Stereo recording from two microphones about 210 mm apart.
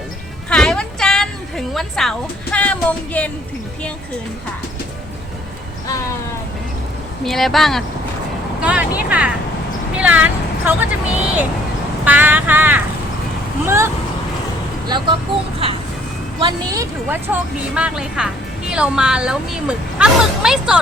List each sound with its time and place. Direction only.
0.5 s a sound: 5° left (ahead or behind)
7.3 s speech: centre (ahead or behind); by 15.1 s 20° right (ahead or behind)
16.4 s speech: 20° right (ahead or behind); by 20.7 s 5° right (ahead or behind)